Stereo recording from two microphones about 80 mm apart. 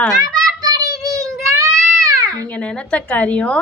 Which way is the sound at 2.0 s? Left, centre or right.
Right.